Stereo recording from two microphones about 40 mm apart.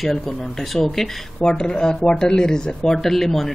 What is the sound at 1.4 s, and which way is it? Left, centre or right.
Speech, centre.